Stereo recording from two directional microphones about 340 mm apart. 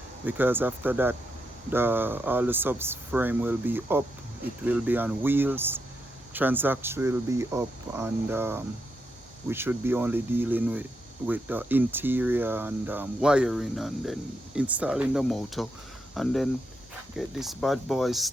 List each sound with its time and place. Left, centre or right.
0.3 s speech: centre